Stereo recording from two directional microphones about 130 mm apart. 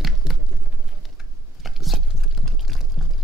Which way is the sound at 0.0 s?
Centre (ahead or behind).